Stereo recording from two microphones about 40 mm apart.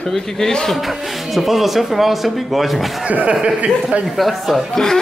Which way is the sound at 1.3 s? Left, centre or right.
Centre.